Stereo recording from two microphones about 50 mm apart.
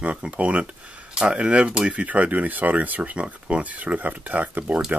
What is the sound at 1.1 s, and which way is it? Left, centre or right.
Speech, centre.